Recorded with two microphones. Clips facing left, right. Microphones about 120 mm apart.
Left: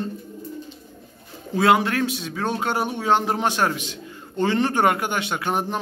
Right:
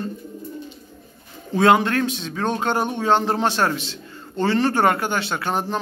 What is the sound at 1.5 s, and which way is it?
Speech, 5° left (ahead or behind).